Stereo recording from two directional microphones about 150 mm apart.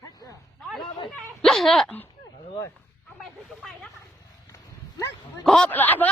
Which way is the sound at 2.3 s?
35° left (ahead or behind).